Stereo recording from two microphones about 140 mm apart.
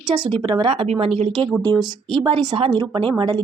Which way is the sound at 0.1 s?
35° right (ahead or behind).